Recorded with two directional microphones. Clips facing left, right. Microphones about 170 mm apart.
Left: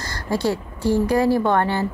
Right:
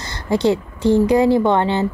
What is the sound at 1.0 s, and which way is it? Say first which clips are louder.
Speech: right 3 dB; 20° right (ahead or behind).